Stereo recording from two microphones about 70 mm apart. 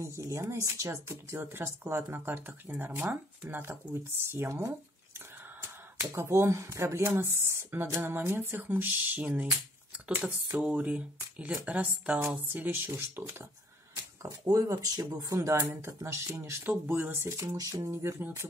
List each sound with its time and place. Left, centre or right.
0.0 s speech: right
5.6 s speech: right
14.2 s a sound: right
15.0 s speech: right
15.3 s speech: right
17.4 s a sound: right
18.2 s speech: right